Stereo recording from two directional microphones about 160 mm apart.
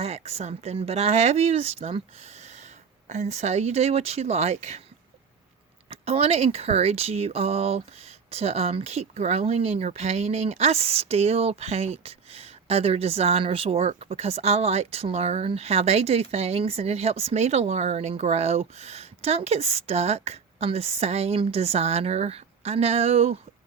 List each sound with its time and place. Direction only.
0.0 s speech: 40° right (ahead or behind)
5.9 s speech: 40° right (ahead or behind)